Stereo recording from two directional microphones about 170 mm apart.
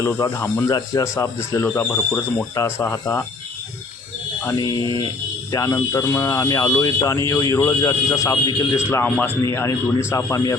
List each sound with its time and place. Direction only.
0.0 s speech: 15° left (ahead or behind)
4.5 s speech: 25° left (ahead or behind)